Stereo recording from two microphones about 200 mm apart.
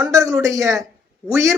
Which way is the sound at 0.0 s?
15° right (ahead or behind).